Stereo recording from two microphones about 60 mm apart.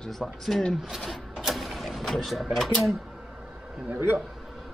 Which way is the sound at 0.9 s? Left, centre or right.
Centre.